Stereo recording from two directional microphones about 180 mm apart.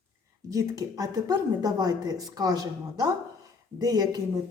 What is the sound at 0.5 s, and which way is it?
Speech, 20° right (ahead or behind).